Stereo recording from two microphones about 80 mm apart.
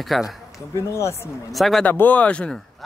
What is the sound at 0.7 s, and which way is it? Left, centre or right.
Speech, left.